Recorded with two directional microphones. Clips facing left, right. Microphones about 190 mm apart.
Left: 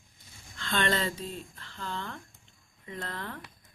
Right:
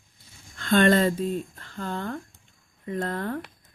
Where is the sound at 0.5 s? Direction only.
50° right (ahead or behind).